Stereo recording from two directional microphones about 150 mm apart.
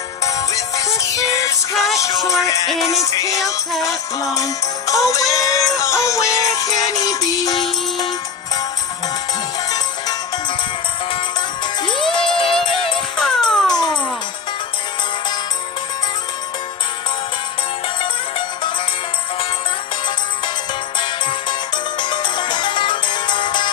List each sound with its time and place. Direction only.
0.3 s music: 20° left (ahead or behind)
11.8 s music: 30° left (ahead or behind)
13.2 s music: 5° left (ahead or behind)
13.7 s music: 25° left (ahead or behind)
22.0 s music: 30° left (ahead or behind)